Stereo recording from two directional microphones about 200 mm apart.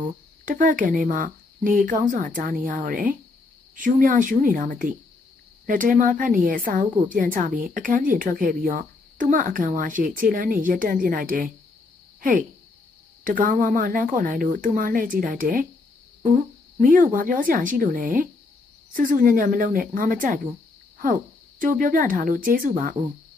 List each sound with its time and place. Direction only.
0.5 s a woman's voice: 40° right (ahead or behind)
16.8 s a woman's voice: 45° right (ahead or behind)